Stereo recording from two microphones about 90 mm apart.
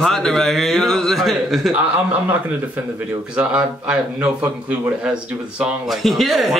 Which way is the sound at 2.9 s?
10° right (ahead or behind).